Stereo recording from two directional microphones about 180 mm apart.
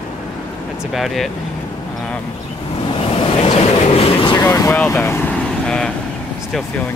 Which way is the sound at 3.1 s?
30° left (ahead or behind).